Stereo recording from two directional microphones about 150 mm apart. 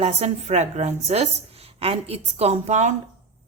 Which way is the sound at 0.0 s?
45° right (ahead or behind).